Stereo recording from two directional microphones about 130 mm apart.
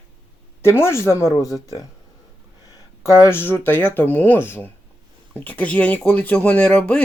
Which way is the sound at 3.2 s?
15° left (ahead or behind).